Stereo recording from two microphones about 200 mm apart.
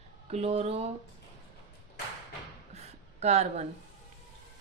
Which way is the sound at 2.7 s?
30° right (ahead or behind).